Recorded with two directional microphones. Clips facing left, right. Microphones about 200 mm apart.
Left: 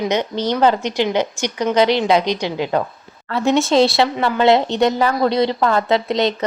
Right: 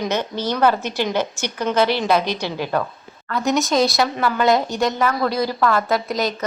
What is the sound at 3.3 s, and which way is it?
A woman's voice, 30° left (ahead or behind).